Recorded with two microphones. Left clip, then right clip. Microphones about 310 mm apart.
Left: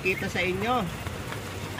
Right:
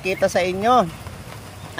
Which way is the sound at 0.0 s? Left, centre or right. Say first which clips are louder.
Right 8 dB; centre.